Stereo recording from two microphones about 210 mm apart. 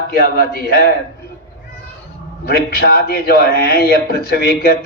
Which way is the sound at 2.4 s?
45° left (ahead or behind).